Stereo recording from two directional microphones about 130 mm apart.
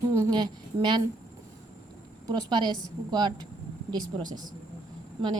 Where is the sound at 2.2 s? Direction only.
35° right (ahead or behind).